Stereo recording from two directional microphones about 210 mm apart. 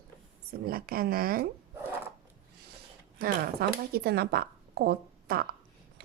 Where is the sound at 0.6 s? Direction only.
45° right (ahead or behind).